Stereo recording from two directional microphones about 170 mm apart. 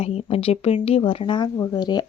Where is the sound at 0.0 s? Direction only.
35° left (ahead or behind).